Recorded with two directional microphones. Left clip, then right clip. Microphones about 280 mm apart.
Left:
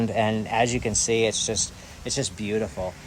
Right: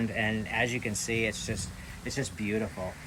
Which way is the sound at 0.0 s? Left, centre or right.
Left.